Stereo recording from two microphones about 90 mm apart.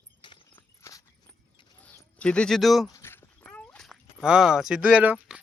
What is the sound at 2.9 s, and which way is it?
Dog, 25° left (ahead or behind).